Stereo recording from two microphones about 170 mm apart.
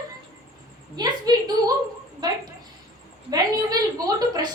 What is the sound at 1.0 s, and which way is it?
A woman's voice, 25° right (ahead or behind).